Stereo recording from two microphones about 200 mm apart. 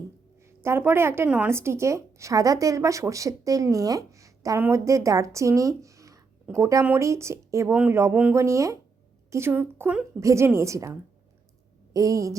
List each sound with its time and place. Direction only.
0.4 s speech: 15° right (ahead or behind)
11.9 s speech: 15° right (ahead or behind)